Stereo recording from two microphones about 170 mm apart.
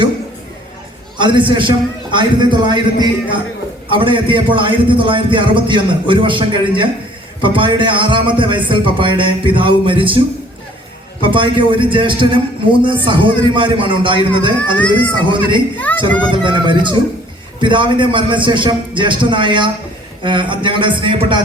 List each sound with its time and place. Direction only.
1.2 s a man's voice: 30° right (ahead or behind)
11.3 s a man's voice: 30° right (ahead or behind)
14.8 s speech: 10° left (ahead or behind)
15.2 s a man's voice: 30° right (ahead or behind)
15.8 s speech: 10° left (ahead or behind)
16.3 s a man's voice: 30° right (ahead or behind)